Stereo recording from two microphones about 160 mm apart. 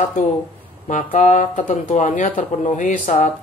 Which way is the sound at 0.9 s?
50° left (ahead or behind).